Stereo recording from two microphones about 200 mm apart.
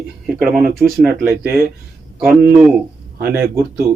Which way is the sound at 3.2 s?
55° right (ahead or behind).